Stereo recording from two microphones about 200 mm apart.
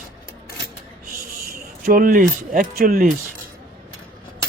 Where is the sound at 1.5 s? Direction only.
45° right (ahead or behind).